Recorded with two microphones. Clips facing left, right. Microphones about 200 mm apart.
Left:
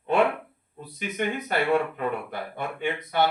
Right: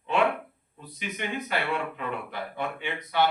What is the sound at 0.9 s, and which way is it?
Speech, 50° left (ahead or behind).